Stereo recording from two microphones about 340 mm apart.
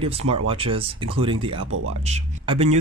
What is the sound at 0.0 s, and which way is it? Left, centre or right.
Speech, centre.